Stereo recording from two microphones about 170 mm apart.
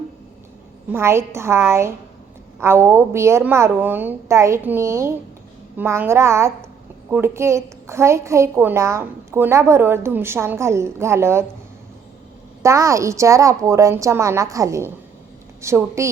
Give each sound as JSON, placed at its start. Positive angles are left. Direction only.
{"t": 0.9, "sound": "a woman's voice", "side_deg": -15}
{"t": 12.6, "sound": "a woman's voice", "side_deg": -20}